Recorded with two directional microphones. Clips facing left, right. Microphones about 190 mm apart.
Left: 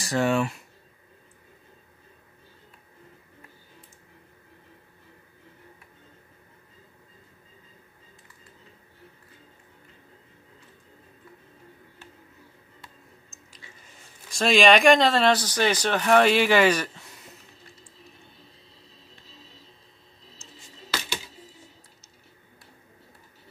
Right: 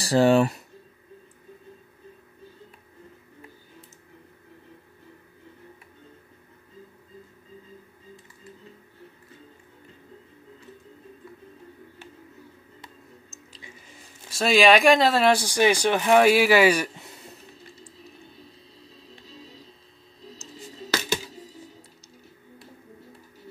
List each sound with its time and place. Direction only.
0.0 s speech: 35° right (ahead or behind)
14.3 s speech: 5° right (ahead or behind)